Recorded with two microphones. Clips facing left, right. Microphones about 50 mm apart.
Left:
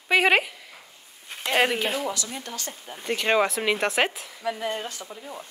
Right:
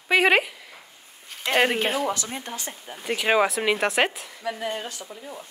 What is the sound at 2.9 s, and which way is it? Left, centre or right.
Speech, centre.